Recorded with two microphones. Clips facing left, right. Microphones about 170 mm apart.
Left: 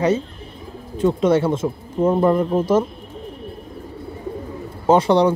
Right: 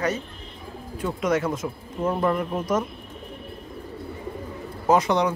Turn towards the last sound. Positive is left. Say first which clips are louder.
# left 6 dB
turn(degrees=30)  # may be behind; listen again after turning